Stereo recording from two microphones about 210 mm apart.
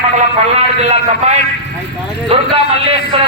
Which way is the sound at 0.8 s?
30° right (ahead or behind).